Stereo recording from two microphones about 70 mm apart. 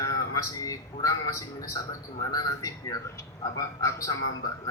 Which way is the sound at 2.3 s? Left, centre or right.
Left.